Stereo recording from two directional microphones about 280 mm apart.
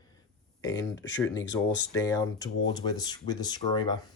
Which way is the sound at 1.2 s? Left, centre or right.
Centre.